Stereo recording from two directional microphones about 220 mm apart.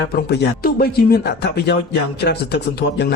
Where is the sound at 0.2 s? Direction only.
45° left (ahead or behind).